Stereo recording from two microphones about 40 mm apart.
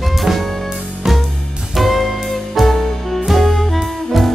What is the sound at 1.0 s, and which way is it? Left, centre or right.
Music, centre.